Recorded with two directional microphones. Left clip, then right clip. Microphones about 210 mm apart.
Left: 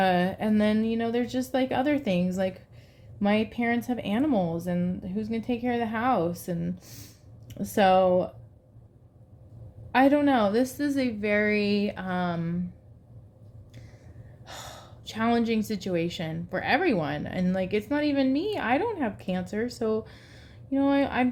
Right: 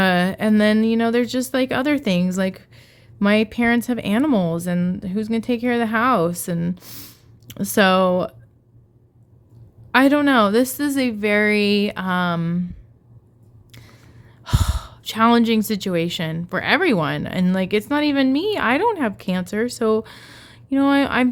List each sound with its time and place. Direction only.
0.0 s speech: 45° right (ahead or behind)
9.9 s speech: 45° right (ahead or behind)
14.4 s speech: 45° right (ahead or behind)